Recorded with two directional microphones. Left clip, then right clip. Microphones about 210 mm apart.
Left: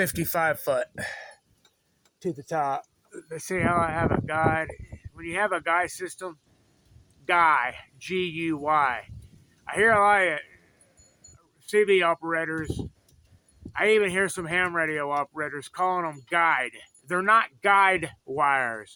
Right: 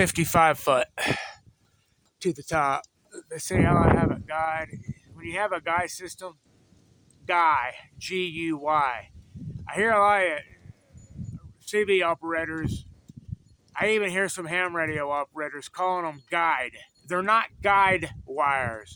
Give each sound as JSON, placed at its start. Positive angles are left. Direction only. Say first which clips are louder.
{"t": 0.0, "sound": "speech", "louder": "right 5 dB", "side_deg": -15}
{"t": 3.1, "sound": "speech", "louder": "even", "side_deg": -5}
{"t": 11.6, "sound": "speech", "louder": "left 2 dB", "side_deg": 5}